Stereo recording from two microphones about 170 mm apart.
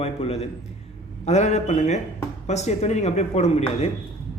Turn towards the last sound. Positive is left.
turn(degrees=40)  # may be behind; listen again after turning